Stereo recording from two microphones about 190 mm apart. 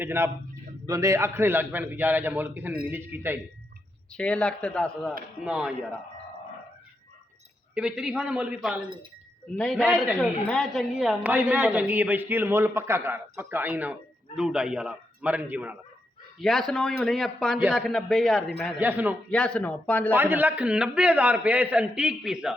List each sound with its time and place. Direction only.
0.0 s a woman's voice: 15° right (ahead or behind)
4.1 s a man's voice: 5° left (ahead or behind)
7.8 s a man's voice: 5° right (ahead or behind)
16.4 s a man's voice: centre (ahead or behind)
18.8 s a woman's voice: 10° right (ahead or behind)
19.3 s speech: 5° left (ahead or behind)
20.1 s a woman's voice: 10° right (ahead or behind)